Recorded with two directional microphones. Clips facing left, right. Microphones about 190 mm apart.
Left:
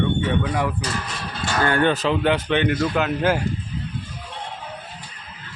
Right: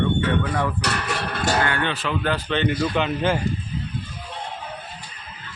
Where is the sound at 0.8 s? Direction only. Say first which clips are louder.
Right 3 dB; 70° right (ahead or behind).